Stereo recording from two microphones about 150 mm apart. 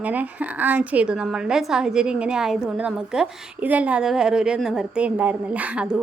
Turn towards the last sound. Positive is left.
turn(degrees=-10)  # may be behind; listen again after turning